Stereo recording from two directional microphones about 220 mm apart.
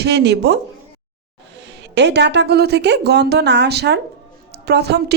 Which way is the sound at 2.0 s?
50° right (ahead or behind).